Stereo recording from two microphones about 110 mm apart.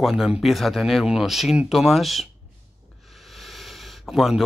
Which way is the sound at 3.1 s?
Centre (ahead or behind).